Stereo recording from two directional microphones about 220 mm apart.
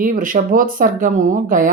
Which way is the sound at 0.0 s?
40° right (ahead or behind).